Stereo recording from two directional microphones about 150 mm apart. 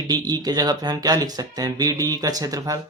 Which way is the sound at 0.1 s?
25° right (ahead or behind).